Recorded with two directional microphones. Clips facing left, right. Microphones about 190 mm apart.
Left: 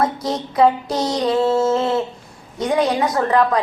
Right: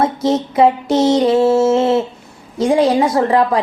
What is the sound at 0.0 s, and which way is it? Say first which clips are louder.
Speech: right 5 dB; 25° right (ahead or behind).